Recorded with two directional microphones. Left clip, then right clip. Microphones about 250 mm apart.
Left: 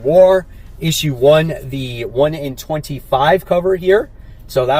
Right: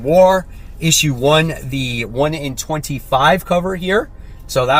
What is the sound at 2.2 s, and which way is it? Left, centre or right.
Speech, centre.